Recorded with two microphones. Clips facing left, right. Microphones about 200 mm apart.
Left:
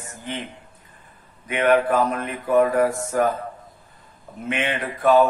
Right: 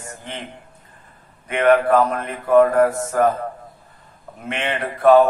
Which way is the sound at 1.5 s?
50° right (ahead or behind).